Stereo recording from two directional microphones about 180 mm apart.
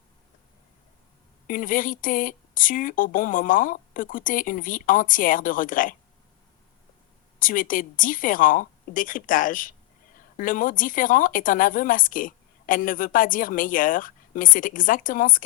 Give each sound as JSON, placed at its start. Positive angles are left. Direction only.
{"t": 1.5, "sound": "speech", "side_deg": 50}
{"t": 7.3, "sound": "speech", "side_deg": 50}